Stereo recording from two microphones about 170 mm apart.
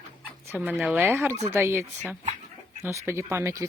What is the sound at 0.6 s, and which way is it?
Speech, 5° right (ahead or behind).